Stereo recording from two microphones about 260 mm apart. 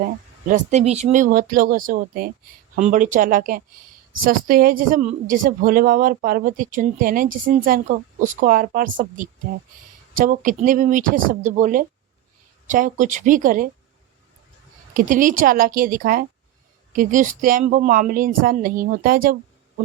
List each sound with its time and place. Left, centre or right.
0.0 s a woman's voice: right
14.9 s a woman's voice: right